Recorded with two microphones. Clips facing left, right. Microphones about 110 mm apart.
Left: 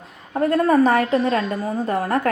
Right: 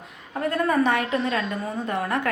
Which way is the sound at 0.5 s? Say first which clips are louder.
Left 6 dB; 40° left (ahead or behind).